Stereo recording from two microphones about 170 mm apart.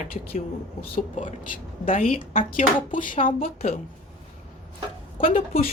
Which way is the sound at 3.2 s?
50° left (ahead or behind).